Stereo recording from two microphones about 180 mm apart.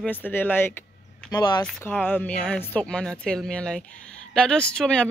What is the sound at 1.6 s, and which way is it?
Speech, 10° left (ahead or behind).